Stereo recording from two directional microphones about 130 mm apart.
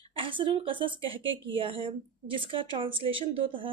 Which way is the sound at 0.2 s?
40° right (ahead or behind).